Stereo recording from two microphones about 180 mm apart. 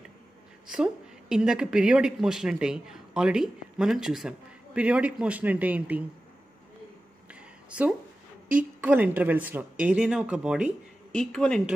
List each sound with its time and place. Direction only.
1.3 s speech: 5° right (ahead or behind)
8.8 s speech: 10° right (ahead or behind)